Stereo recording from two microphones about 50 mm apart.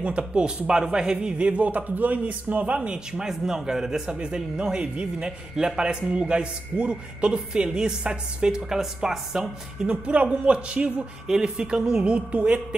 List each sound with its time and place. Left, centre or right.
0.2 s a man's voice: right
3.1 s speech: centre
4.1 s a man's voice: right
11.2 s speech: centre